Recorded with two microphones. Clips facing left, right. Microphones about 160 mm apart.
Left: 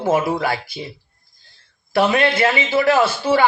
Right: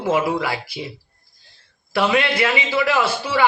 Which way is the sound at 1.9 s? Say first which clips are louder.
Left 3 dB; 30° left (ahead or behind).